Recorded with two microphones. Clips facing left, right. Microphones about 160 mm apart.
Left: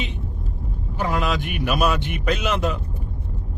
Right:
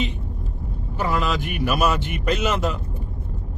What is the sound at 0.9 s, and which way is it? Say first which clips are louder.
Vehicle: even; 45° left (ahead or behind).